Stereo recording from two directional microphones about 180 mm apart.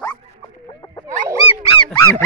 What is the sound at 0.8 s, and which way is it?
Wild animals, 20° left (ahead or behind).